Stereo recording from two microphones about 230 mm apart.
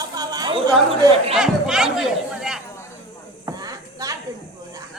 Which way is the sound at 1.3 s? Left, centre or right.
Centre.